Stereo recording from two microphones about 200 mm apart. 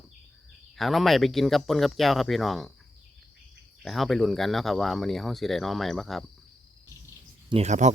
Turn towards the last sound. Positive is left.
turn(degrees=-35)  # may be behind; listen again after turning